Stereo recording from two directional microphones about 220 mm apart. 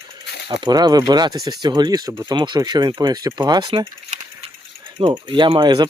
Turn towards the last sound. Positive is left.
turn(degrees=-20)  # may be behind; listen again after turning